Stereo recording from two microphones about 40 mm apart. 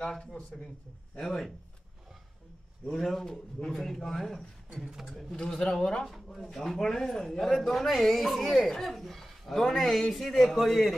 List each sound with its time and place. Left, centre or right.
0.5 s speech: centre
1.2 s speech: centre
2.9 s speech: centre
4.9 s speech: centre
5.3 s speech: centre
6.2 s speech: centre